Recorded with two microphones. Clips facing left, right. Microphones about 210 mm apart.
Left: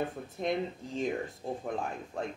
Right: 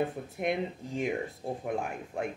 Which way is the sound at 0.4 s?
10° right (ahead or behind).